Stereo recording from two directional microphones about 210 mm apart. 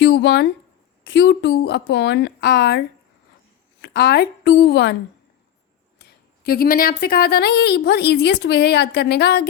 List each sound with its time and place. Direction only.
0.0 s a woman's voice: 55° left (ahead or behind)
6.4 s a woman's voice: 45° left (ahead or behind)